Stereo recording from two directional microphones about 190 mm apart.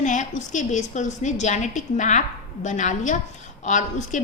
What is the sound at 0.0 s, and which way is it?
A woman's voice, 40° left (ahead or behind).